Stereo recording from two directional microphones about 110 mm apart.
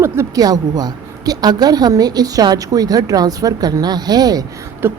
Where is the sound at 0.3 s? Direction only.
35° right (ahead or behind).